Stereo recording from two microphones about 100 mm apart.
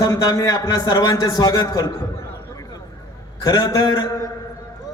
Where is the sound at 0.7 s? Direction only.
40° left (ahead or behind).